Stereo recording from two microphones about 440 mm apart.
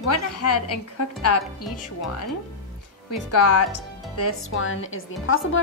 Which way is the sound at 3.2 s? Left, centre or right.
Left.